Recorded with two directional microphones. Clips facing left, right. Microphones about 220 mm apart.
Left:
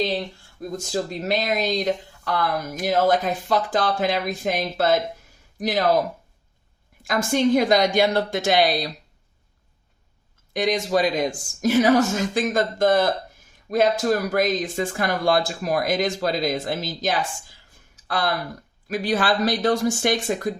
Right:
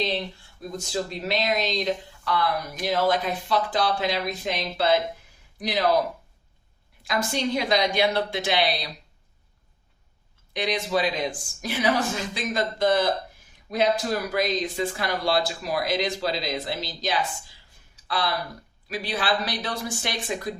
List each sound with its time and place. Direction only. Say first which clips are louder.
0.8 s speech: left 2 dB; 45° left (ahead or behind)
7.0 s speech: left 6 dB; 50° left (ahead or behind)
10.5 s speech: left 4 dB; 45° left (ahead or behind)
17.9 s a sound: left 3 dB; 50° left (ahead or behind)
18.9 s speech: left 5 dB; 45° left (ahead or behind)